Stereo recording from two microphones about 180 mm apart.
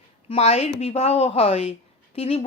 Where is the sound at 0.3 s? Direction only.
35° left (ahead or behind).